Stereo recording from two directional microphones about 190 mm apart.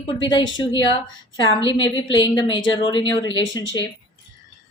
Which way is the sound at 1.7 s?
25° left (ahead or behind).